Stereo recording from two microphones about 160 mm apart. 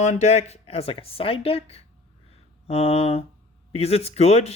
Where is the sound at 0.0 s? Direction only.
45° left (ahead or behind).